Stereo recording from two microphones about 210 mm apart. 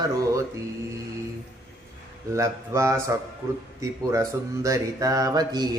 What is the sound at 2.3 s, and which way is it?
Speech, 15° right (ahead or behind).